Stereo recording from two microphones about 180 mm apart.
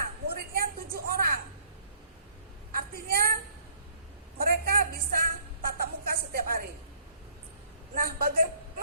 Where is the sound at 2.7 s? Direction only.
55° right (ahead or behind).